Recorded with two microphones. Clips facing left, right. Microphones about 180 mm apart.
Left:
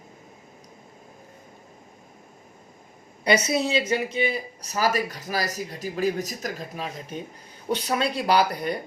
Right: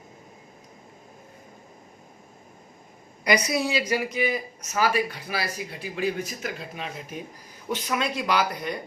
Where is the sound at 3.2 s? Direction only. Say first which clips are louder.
Left 2 dB; 25° left (ahead or behind).